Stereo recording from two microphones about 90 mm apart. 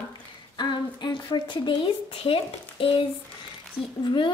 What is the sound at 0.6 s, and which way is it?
Speech, 55° left (ahead or behind).